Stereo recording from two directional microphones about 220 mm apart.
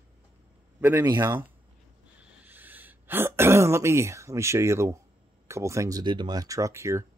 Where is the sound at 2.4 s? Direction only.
10° right (ahead or behind).